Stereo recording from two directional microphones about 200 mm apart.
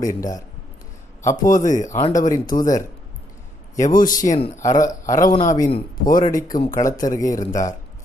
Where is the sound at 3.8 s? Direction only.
45° left (ahead or behind).